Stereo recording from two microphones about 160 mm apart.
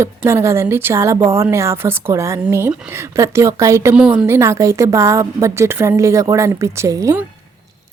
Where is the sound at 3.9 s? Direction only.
5° right (ahead or behind).